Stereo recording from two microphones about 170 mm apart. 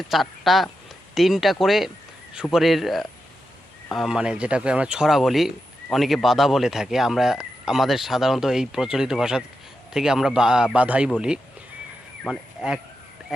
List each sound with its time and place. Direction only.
0.1 s speech: centre (ahead or behind)
12.2 s speech: centre (ahead or behind)